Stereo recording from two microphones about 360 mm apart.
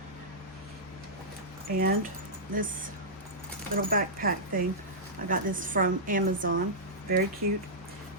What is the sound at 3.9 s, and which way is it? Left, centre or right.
A woman's voice, right.